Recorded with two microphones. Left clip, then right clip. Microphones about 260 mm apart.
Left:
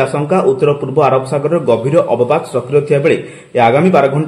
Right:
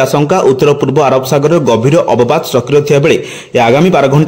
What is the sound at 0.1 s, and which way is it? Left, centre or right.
A man's voice, right.